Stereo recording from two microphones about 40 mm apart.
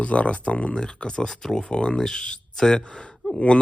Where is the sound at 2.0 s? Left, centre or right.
Centre.